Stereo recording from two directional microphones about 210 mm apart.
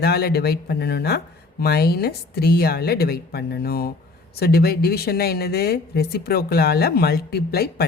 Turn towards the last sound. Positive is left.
turn(degrees=50)  # may be behind; listen again after turning